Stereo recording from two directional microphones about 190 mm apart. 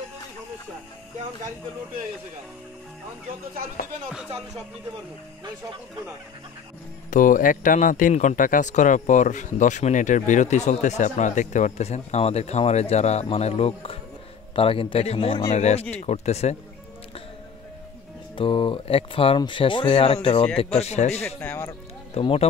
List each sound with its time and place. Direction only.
7.1 s speech: 45° left (ahead or behind)
18.3 s speech: 25° left (ahead or behind)
21.4 s speech: 10° left (ahead or behind)
22.1 s speech: 30° left (ahead or behind)